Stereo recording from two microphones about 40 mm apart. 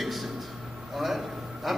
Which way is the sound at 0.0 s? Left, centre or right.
Centre.